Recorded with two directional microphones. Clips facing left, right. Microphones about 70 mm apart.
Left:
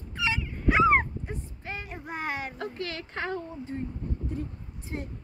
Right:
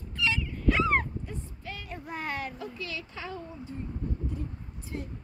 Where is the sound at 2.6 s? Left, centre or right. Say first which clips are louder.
Left 3 dB; left.